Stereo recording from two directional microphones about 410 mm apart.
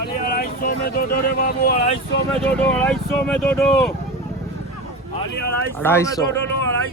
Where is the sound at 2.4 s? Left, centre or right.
Centre.